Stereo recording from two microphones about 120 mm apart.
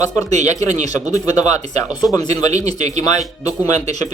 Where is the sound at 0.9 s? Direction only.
30° left (ahead or behind).